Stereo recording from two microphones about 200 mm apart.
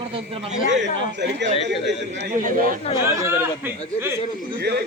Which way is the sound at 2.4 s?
45° right (ahead or behind).